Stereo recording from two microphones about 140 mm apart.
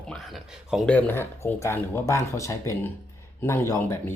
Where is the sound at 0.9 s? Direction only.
10° left (ahead or behind).